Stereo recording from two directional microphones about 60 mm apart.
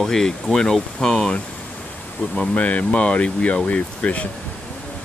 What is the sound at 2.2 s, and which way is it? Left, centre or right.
Speech, left.